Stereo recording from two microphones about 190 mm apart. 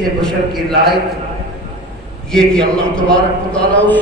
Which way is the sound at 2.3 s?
5° left (ahead or behind).